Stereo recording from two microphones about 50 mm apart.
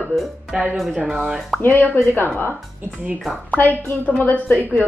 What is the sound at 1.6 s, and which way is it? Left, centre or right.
A woman's voice, left.